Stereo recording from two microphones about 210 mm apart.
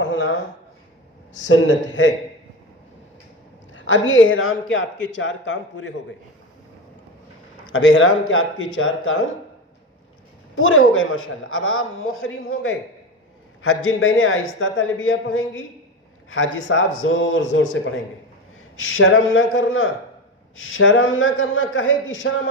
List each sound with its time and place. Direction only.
0.0 s a sound: 60° left (ahead or behind)
1.4 s speech: 60° left (ahead or behind)
3.7 s speech: 65° left (ahead or behind)
7.7 s a man's voice: 65° left (ahead or behind)
10.5 s a man's voice: 70° left (ahead or behind)